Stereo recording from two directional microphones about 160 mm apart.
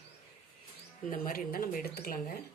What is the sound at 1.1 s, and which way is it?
Speech, 60° left (ahead or behind).